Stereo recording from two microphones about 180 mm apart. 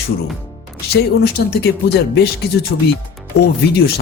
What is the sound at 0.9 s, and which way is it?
Speech, 65° left (ahead or behind).